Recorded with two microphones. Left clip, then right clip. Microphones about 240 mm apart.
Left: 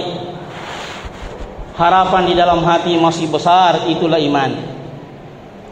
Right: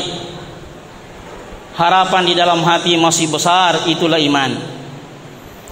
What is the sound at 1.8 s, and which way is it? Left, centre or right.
A man's voice, right.